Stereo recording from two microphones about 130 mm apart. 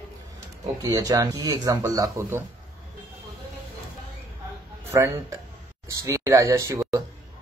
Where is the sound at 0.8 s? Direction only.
25° right (ahead or behind).